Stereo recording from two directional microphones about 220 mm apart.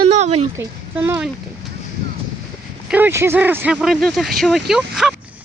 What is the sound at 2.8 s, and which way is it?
A woman's voice, 10° right (ahead or behind).